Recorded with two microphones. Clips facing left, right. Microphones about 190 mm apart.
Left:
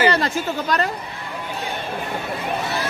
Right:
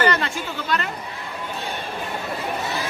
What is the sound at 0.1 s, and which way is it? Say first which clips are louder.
Speech: left 4 dB; 40° left (ahead or behind).